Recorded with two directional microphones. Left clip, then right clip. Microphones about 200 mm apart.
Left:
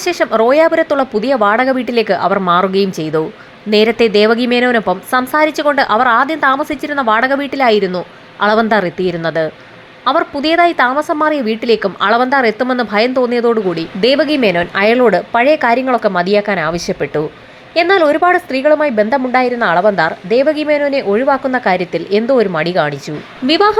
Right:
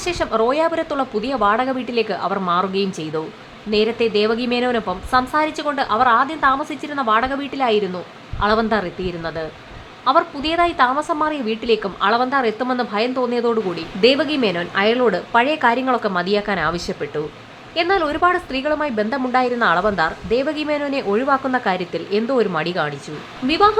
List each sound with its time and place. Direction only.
0.0 s a woman's voice: 20° left (ahead or behind)